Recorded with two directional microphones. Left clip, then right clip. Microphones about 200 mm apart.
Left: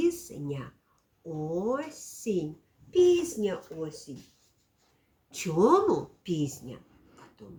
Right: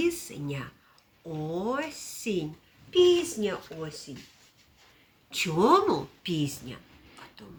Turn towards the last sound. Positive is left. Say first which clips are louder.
# right 6 dB
turn(degrees=-5)  # may be behind; listen again after turning